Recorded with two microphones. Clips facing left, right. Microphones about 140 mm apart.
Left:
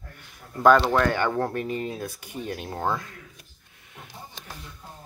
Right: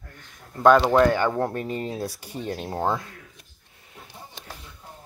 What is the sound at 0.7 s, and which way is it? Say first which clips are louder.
Speech: right 3 dB; 15° right (ahead or behind).